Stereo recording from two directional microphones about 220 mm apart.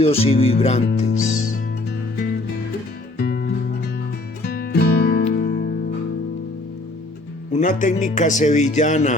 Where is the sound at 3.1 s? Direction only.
45° left (ahead or behind).